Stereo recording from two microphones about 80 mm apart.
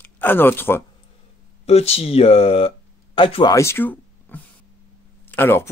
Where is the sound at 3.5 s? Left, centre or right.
Left.